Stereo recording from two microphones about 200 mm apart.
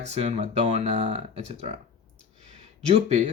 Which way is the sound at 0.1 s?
30° right (ahead or behind).